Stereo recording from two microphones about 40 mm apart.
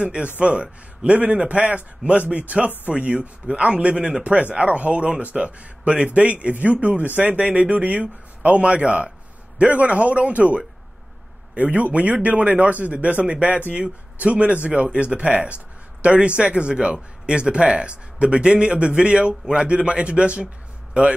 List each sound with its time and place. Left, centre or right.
0.0 s a man's voice: right